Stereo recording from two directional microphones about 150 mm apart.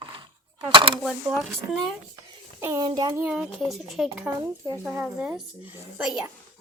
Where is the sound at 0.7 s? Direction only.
35° right (ahead or behind).